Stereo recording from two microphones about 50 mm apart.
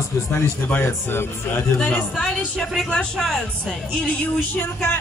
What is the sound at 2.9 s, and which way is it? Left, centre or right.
Speech, centre.